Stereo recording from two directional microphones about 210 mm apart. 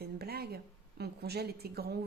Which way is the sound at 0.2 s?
50° right (ahead or behind).